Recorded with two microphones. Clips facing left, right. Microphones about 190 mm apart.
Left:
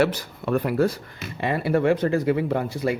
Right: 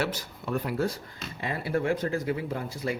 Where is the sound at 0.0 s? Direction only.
65° left (ahead or behind).